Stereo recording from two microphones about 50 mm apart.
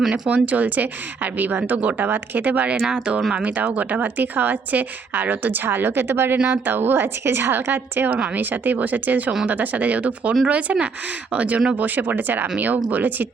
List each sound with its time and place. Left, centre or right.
0.1 s speech: right
2.8 s a woman's voice: centre; by 13.2 s right